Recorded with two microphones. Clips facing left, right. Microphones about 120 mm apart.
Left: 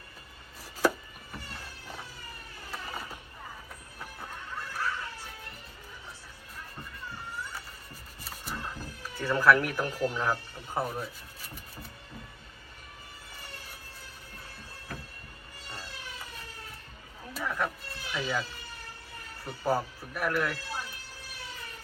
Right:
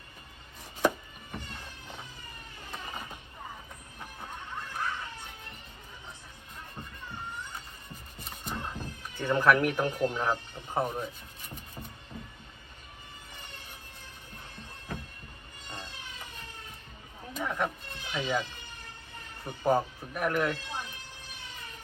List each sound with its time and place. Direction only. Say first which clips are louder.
0.8 s a sound: even; 20° right (ahead or behind)
2.6 s vehicle: left 1 dB; 20° right (ahead or behind)
4.7 s music: left 1 dB; 20° right (ahead or behind)
8.2 s speech: right 1 dB; 20° right (ahead or behind)
15.6 s a sound: right 1 dB; 20° right (ahead or behind)
17.4 s cat: right 1 dB; 20° right (ahead or behind)
19.5 s speech: right 3 dB; 20° right (ahead or behind)